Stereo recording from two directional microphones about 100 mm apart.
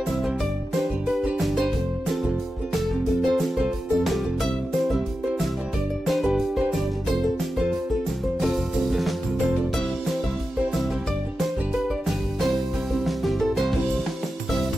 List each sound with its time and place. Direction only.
3.2 s music: centre (ahead or behind)
6.0 s music: centre (ahead or behind)
13.0 s music: centre (ahead or behind)